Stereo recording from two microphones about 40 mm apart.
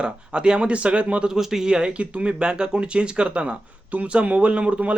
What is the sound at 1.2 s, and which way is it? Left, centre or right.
Speech, centre.